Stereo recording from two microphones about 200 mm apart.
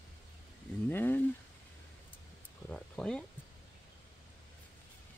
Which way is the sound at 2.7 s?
5° left (ahead or behind).